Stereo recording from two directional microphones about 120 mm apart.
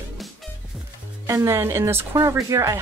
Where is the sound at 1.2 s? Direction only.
20° right (ahead or behind).